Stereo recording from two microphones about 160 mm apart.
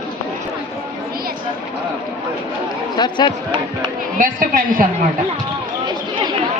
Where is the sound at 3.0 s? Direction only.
30° left (ahead or behind).